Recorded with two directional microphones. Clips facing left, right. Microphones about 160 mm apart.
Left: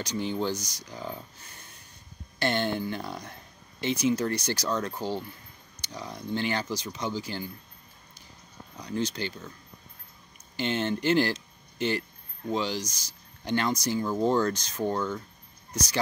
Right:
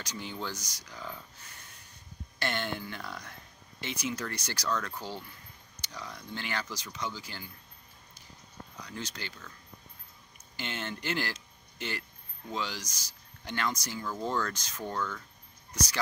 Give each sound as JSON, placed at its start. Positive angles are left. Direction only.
{"t": 0.0, "sound": "speech", "side_deg": 25}
{"t": 2.3, "sound": "speech", "side_deg": 25}
{"t": 8.8, "sound": "speech", "side_deg": 25}
{"t": 10.5, "sound": "speech", "side_deg": 25}
{"t": 12.4, "sound": "speech", "side_deg": 25}